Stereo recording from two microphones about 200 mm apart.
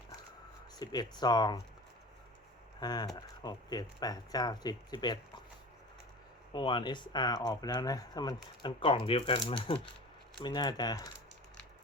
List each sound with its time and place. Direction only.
0.8 s speech: 20° left (ahead or behind)
2.8 s speech: 20° left (ahead or behind)
6.5 s speech: 25° left (ahead or behind)